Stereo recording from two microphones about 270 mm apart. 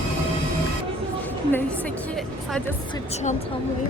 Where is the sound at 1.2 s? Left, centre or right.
Centre.